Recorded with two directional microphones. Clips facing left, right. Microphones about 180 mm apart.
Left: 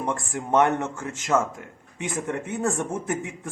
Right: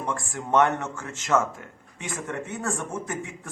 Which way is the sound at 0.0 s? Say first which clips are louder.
Left 3 dB; 15° left (ahead or behind).